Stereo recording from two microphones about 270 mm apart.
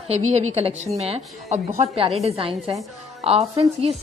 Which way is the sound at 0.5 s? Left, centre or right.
Right.